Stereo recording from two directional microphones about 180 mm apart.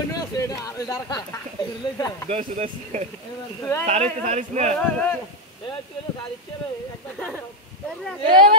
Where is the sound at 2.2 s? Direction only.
40° right (ahead or behind).